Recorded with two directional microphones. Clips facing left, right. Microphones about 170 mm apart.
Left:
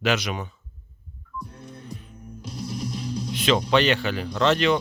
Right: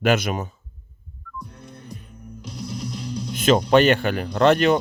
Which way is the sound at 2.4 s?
5° left (ahead or behind).